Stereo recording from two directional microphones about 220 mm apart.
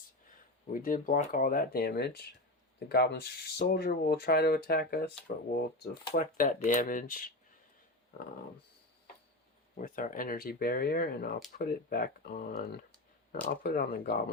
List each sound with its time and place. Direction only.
0.7 s speech: 40° left (ahead or behind)
6.1 s speech: 35° left (ahead or behind)
9.7 s speech: 40° left (ahead or behind)